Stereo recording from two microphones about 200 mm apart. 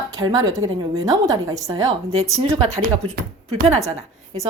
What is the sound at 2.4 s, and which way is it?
Speech, 30° right (ahead or behind).